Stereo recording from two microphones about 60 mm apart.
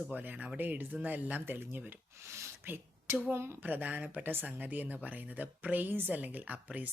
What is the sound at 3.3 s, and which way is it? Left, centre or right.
Speech, right.